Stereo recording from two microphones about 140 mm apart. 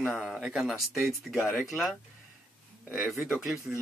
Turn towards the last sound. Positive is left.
turn(degrees=0)  # may be behind; listen again after turning